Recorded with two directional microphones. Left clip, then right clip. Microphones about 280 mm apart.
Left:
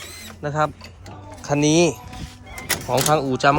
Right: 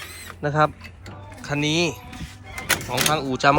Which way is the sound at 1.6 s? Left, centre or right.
Centre.